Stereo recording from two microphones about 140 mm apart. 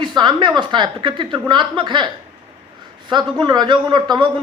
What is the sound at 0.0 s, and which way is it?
A woman's voice, 30° right (ahead or behind).